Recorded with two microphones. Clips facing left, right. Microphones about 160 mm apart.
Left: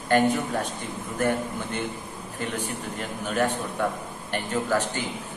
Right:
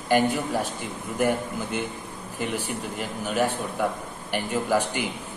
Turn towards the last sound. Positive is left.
turn(degrees=-10)  # may be behind; listen again after turning